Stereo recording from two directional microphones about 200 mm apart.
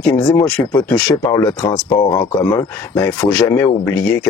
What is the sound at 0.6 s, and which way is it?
Speech, 15° left (ahead or behind).